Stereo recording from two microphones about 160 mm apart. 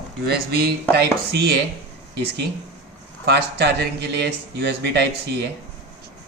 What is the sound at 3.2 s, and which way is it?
Speech, 90° right.